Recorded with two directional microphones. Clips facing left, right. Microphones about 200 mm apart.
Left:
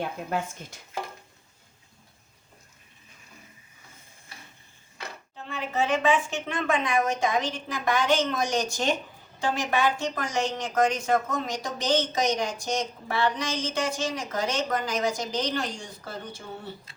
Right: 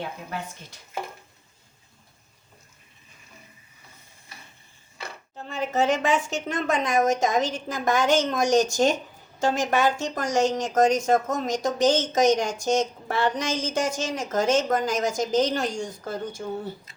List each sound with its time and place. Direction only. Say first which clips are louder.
0.3 s speech: left 4 dB; 50° left (ahead or behind)
5.5 s speech: right 3 dB; 45° right (ahead or behind)